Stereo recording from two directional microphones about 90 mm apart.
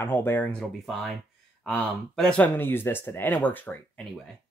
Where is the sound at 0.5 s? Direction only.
10° left (ahead or behind).